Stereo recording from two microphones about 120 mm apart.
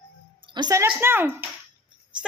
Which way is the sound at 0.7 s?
20° right (ahead or behind).